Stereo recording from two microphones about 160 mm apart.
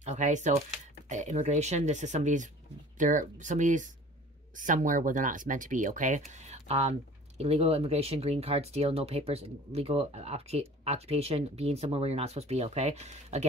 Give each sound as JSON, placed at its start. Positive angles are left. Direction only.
{"t": 0.0, "sound": "speech", "side_deg": -50}